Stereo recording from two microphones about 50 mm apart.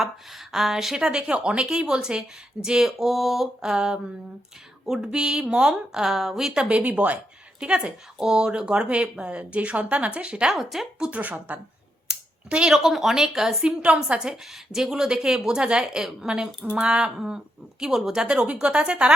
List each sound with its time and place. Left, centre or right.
0.0 s speech: centre
1.3 s speech: right; by 3.7 s centre
3.7 s speech: centre
6.7 s speech: right
10.5 s speech: centre
11.1 s speech: right
12.0 s a sound: centre
12.7 s speech: centre
13.7 s speech: right
18.3 s speech: right